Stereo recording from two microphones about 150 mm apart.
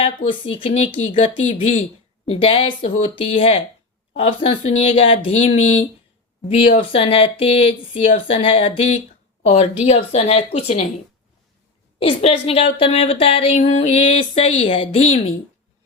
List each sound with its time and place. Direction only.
0.0 s speech: 35° left (ahead or behind)
1.4 s speech: 55° left (ahead or behind)
2.3 s speech: 35° left (ahead or behind)
11.9 s speech: 35° left (ahead or behind)